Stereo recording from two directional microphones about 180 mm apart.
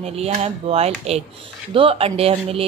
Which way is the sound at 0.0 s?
35° right (ahead or behind).